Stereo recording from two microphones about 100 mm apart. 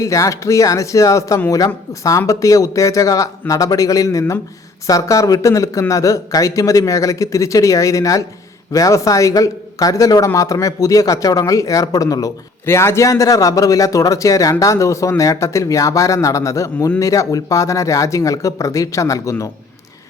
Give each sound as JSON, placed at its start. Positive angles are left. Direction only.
{"t": 0.0, "sound": "a man's voice", "side_deg": 35}